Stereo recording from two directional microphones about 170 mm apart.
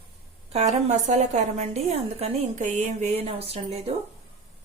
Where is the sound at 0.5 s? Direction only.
45° right (ahead or behind).